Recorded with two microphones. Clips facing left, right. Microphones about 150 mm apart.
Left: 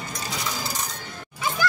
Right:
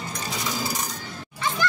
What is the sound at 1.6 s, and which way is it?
Dog, 5° left (ahead or behind).